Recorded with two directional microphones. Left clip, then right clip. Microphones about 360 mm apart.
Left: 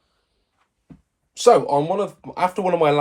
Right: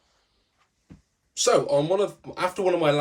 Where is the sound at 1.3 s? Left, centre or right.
Centre.